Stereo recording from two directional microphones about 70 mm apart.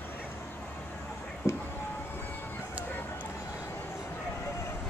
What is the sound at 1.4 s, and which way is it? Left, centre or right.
Music, left.